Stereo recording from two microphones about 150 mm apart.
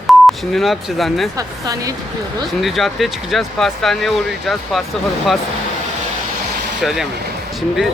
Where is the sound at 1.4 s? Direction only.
25° right (ahead or behind).